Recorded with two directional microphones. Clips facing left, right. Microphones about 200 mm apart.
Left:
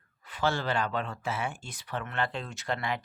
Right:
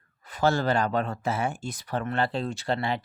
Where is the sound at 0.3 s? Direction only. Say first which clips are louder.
Right 6 dB; 40° right (ahead or behind).